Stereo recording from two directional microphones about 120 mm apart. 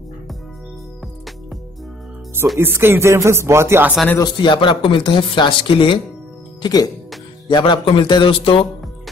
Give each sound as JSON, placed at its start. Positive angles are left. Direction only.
{"t": 2.6, "sound": "speech", "side_deg": -20}
{"t": 4.2, "sound": "speech", "side_deg": 40}
{"t": 6.6, "sound": "speech", "side_deg": 35}